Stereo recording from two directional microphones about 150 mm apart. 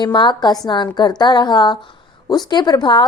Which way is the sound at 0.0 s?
30° left (ahead or behind).